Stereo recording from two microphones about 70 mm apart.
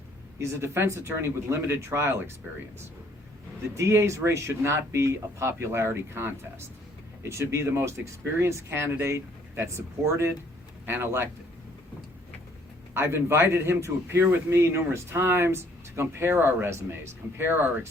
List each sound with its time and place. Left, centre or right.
0.3 s speech: right
3.8 s speech: right
12.9 s speech: right